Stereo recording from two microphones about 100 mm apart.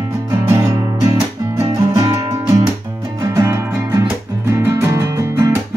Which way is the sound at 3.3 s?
30° right (ahead or behind).